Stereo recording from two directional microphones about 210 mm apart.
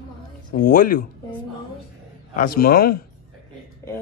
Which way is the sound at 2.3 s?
45° left (ahead or behind).